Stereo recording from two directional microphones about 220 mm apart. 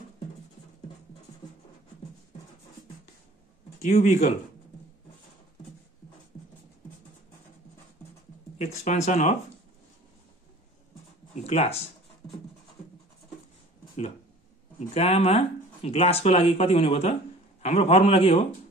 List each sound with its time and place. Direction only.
3.8 s speech: 30° left (ahead or behind)
8.5 s speech: 30° left (ahead or behind)
11.4 s speech: 30° left (ahead or behind)
15.0 s speech: 25° left (ahead or behind)